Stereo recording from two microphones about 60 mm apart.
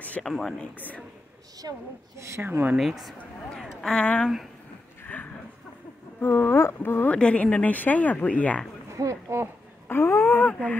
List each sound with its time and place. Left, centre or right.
0.2 s speech: centre
0.7 s speech: left
1.6 s a woman's voice: right
2.1 s a woman's voice: right
2.4 s speech: right
2.8 s speech: centre
3.5 s speech: centre
4.0 s speech: left
5.0 s a sound: left
6.2 s speech: left
7.1 s speech: left
8.9 s speech: right
9.8 s speech: left
10.3 s speech: left